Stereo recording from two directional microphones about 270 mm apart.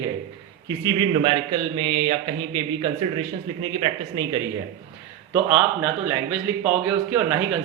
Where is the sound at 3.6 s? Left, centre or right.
Centre.